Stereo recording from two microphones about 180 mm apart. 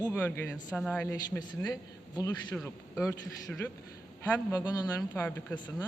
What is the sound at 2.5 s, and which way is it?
Speech, centre (ahead or behind).